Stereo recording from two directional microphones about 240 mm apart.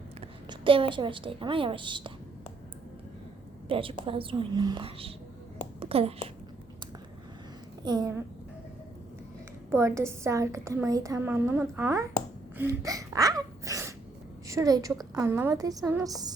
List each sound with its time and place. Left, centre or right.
0.2 s a woman's voice: right
3.7 s a woman's voice: right
7.9 s a woman's voice: centre
9.7 s a woman's voice: centre
12.5 s sneeze: centre
14.4 s a woman's voice: centre